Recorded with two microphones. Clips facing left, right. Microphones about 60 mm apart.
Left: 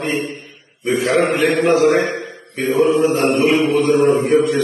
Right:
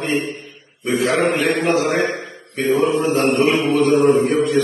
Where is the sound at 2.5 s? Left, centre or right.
Centre.